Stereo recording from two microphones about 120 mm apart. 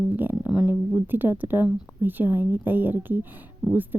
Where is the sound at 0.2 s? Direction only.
15° right (ahead or behind).